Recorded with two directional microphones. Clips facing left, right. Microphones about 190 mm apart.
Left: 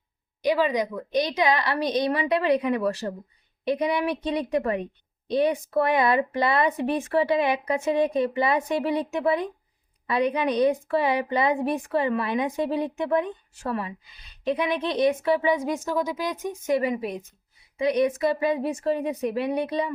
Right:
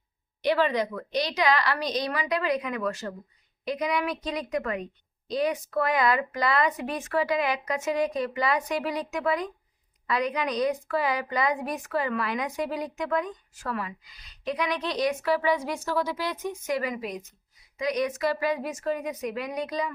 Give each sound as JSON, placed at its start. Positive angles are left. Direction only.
{"t": 0.4, "sound": "speech", "side_deg": 15}